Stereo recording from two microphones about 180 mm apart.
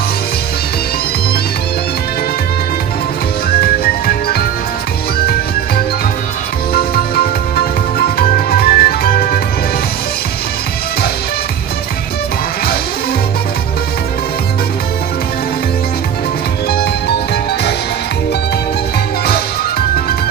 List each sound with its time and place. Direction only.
3.8 s music: 60° left (ahead or behind)
6.7 s music: 60° left (ahead or behind)